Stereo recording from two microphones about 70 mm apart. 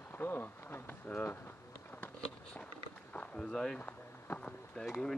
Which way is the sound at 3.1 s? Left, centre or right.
Centre.